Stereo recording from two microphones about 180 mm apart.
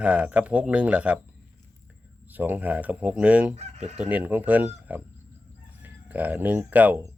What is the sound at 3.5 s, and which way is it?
Chicken, 35° right (ahead or behind).